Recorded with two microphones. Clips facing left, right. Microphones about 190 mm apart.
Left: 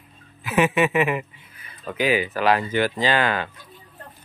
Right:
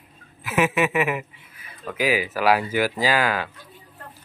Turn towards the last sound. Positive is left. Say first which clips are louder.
# even
turn(degrees=-5)  # may be behind; listen again after turning